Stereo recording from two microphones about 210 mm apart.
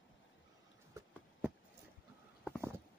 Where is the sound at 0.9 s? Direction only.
15° right (ahead or behind).